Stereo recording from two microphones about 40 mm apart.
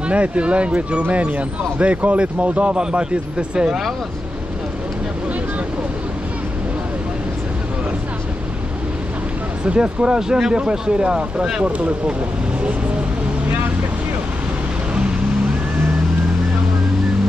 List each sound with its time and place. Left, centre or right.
0.1 s speech: right
9.7 s speech: right